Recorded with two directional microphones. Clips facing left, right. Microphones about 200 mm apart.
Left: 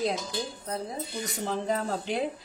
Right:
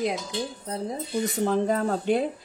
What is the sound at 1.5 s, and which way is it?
Speech, 50° right (ahead or behind).